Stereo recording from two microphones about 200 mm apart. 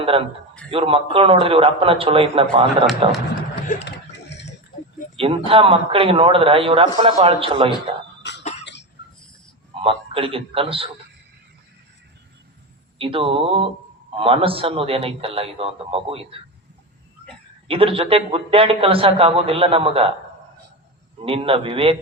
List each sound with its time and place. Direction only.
0.0 s a man's voice: 25° right (ahead or behind)
3.8 s a sound: 60° left (ahead or behind)
5.1 s a man's voice: 25° right (ahead or behind)
8.2 s cough: 60° left (ahead or behind)
9.8 s a man's voice: 25° right (ahead or behind)
13.0 s a man's voice: 25° right (ahead or behind)
17.7 s a man's voice: 30° right (ahead or behind)
21.2 s a man's voice: 25° right (ahead or behind)